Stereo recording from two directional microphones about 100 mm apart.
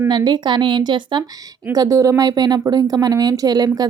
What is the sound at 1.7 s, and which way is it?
A woman's voice, 35° right (ahead or behind).